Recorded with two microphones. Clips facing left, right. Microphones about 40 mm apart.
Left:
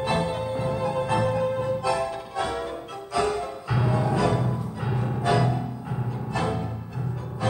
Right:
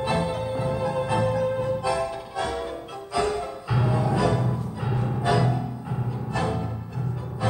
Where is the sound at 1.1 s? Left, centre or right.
Centre.